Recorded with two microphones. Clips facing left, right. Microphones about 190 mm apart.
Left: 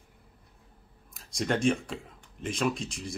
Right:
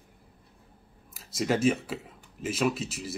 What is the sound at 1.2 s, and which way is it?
Speech, 5° right (ahead or behind).